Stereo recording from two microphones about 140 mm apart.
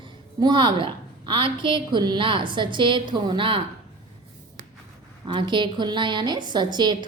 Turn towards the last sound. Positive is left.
turn(degrees=-30)  # may be behind; listen again after turning